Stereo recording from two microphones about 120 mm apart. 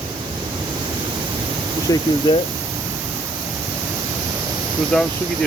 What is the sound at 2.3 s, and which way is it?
Speech, 40° left (ahead or behind).